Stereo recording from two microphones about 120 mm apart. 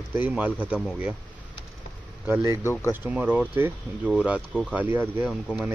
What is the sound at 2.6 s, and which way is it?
Speech, 20° left (ahead or behind).